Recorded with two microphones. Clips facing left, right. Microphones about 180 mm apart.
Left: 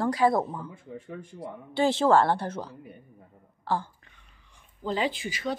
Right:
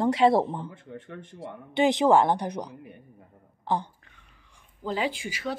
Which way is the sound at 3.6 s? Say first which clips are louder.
Right 1 dB; 20° right (ahead or behind).